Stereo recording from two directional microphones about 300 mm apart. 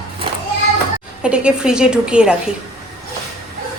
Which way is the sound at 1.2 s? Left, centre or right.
Centre.